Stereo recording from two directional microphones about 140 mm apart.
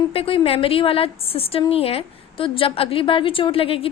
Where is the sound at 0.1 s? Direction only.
40° left (ahead or behind).